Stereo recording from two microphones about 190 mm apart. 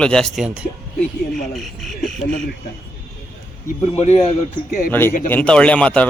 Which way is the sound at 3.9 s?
35° left (ahead or behind).